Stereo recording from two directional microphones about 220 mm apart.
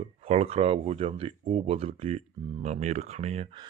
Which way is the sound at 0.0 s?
30° right (ahead or behind).